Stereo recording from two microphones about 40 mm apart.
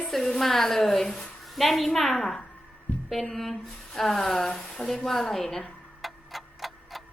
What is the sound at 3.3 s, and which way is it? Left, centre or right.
Speech, centre.